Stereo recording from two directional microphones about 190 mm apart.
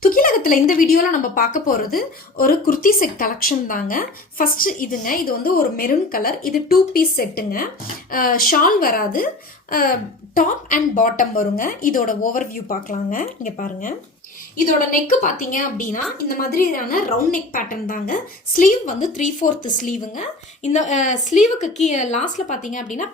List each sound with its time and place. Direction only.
0.0 s a woman's voice: 50° left (ahead or behind)